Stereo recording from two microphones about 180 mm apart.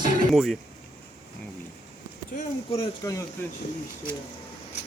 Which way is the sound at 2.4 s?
35° left (ahead or behind).